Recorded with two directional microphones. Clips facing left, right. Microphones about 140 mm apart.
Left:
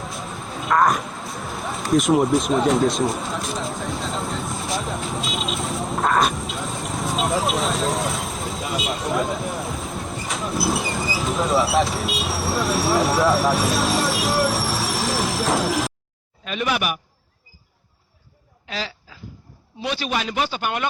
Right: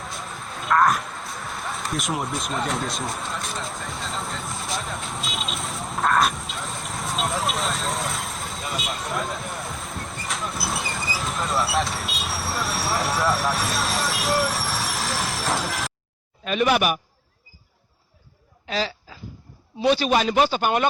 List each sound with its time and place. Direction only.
0.0 s a sound: centre (ahead or behind)
16.5 s a man's voice: 45° right (ahead or behind)
19.8 s a man's voice: 35° right (ahead or behind)